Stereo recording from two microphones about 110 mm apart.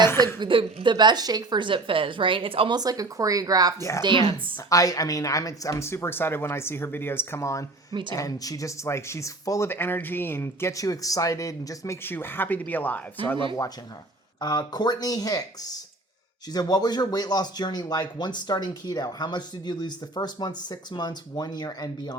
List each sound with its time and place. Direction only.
0.3 s a woman's voice: 50° right (ahead or behind)
2.7 s speech: 35° right (ahead or behind)
4.0 s a woman's voice: 50° right (ahead or behind)
4.7 s speech: 30° left (ahead or behind)
12.0 s speech: 20° left (ahead or behind)
14.3 s speech: 40° left (ahead or behind)